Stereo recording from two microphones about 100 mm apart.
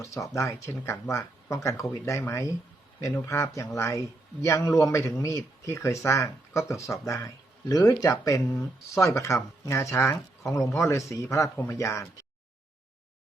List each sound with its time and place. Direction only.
0.0 s a man's voice: 30° left (ahead or behind)